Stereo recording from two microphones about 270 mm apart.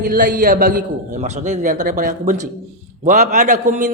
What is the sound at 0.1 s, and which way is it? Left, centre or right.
A man's voice, right.